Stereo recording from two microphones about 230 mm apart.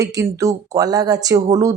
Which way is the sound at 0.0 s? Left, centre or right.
Centre.